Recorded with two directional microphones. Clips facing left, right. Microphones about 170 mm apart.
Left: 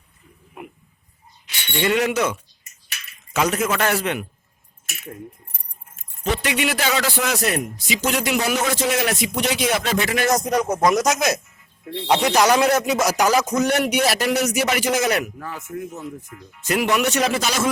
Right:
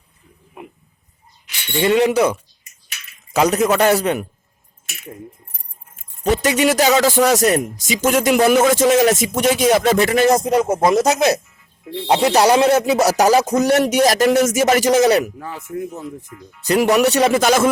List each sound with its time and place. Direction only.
1.8 s rapping: 30° right (ahead or behind)
6.3 s speech: 40° right (ahead or behind)
10.2 s a man's voice: 25° right (ahead or behind)
13.0 s rapping: 35° right (ahead or behind)
15.4 s a man's voice: 30° right (ahead or behind)
15.8 s rapping: 35° right (ahead or behind)
17.3 s speech: 55° right (ahead or behind)